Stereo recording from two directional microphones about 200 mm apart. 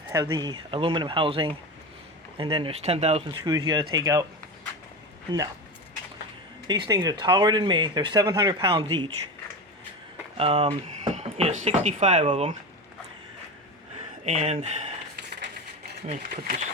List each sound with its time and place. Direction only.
0.1 s speech: 15° right (ahead or behind)
3.4 s speech: 20° right (ahead or behind)
6.7 s speech: 20° right (ahead or behind)
8.7 s speech: 25° right (ahead or behind)
10.3 s speech: 30° right (ahead or behind)
14.3 s speech: 35° right (ahead or behind)
16.0 s speech: 35° right (ahead or behind)